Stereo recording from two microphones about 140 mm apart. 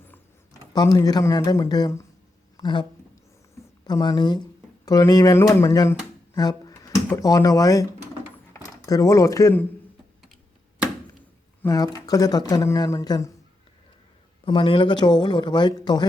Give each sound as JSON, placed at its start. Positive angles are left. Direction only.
{"t": 0.7, "sound": "speech", "side_deg": 25}
{"t": 3.8, "sound": "speech", "side_deg": 30}
{"t": 11.6, "sound": "speech", "side_deg": 25}
{"t": 14.4, "sound": "speech", "side_deg": 40}